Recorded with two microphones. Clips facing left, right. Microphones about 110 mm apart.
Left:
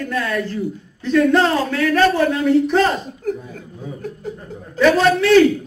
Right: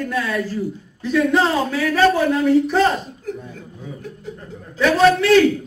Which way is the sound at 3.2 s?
50° left (ahead or behind).